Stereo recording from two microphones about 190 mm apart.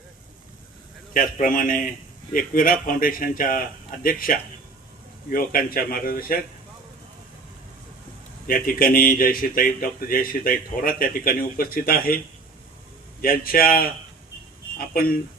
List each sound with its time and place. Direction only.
1.1 s speech: 45° left (ahead or behind)
8.4 s speech: 50° left (ahead or behind)
13.2 s speech: 50° left (ahead or behind)
14.9 s speech: 50° left (ahead or behind)